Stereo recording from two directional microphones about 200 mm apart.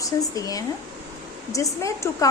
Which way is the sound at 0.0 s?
15° left (ahead or behind).